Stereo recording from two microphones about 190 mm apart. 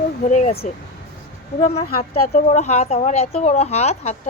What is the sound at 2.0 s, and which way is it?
Speech, 40° left (ahead or behind).